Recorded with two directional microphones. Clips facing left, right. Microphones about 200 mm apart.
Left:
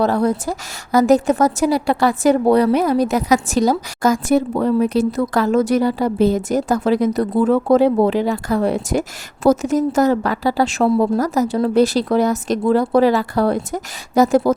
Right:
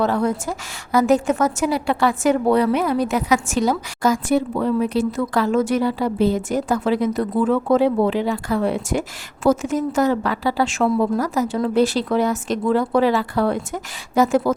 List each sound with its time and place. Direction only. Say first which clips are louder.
0.0 s a woman's voice: left 3 dB; 35° left (ahead or behind)